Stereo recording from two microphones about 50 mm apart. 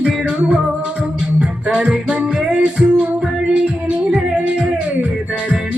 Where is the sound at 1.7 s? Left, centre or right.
Centre.